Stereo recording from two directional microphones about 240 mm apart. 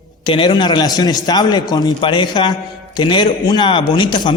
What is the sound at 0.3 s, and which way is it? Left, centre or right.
A man's voice, centre.